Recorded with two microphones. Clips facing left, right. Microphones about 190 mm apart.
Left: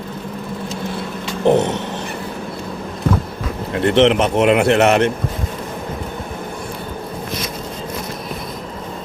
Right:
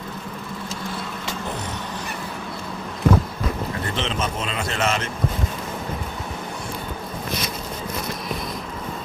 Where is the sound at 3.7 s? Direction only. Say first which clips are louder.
Left 14 dB; 70° left (ahead or behind).